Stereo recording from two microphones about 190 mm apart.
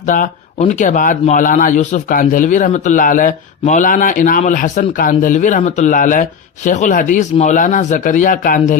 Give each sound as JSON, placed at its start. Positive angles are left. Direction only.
{"t": 0.0, "sound": "speech", "side_deg": 45}